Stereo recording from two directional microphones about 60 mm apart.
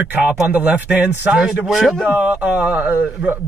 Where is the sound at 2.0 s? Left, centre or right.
Right.